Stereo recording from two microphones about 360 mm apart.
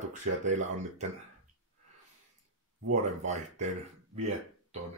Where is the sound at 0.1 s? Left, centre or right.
Centre.